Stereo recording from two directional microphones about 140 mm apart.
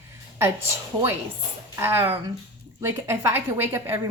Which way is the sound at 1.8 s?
15° right (ahead or behind).